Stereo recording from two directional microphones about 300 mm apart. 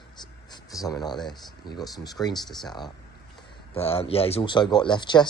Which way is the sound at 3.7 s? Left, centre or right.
Centre.